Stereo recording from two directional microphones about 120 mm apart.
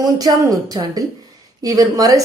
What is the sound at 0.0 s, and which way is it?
A woman's voice, 30° right (ahead or behind).